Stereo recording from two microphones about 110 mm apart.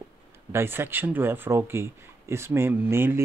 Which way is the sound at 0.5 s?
20° right (ahead or behind).